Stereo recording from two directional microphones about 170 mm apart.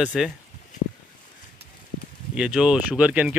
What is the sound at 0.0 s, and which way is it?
Speech, 10° right (ahead or behind).